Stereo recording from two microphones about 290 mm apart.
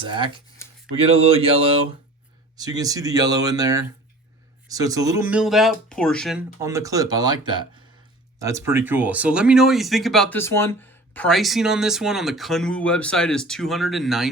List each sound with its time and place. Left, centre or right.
0.0 s speech: centre